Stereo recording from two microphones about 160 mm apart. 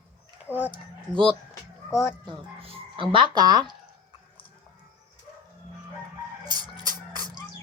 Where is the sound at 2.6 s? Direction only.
35° right (ahead or behind).